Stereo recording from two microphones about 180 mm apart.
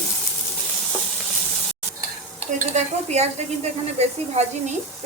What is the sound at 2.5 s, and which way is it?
Stir, 40° right (ahead or behind).